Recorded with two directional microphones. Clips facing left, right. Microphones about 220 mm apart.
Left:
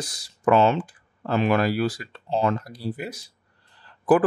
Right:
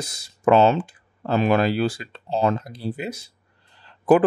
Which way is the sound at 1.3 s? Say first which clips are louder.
Right 2 dB; 30° right (ahead or behind).